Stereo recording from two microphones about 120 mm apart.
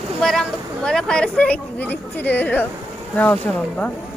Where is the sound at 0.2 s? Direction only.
5° left (ahead or behind).